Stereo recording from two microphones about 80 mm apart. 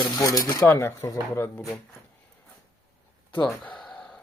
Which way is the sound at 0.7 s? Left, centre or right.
Left.